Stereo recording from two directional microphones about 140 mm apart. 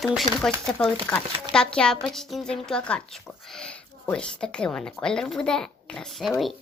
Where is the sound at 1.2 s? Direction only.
40° right (ahead or behind).